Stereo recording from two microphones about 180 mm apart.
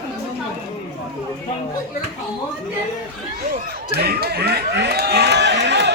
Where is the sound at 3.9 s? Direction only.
60° right (ahead or behind).